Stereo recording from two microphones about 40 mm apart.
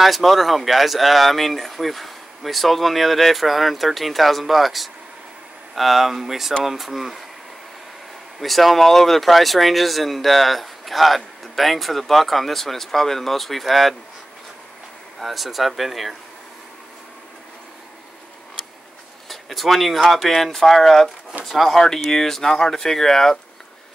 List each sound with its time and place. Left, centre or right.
0.0 s speech: centre
8.4 s speech: centre
15.1 s speech: centre
19.2 s speech: centre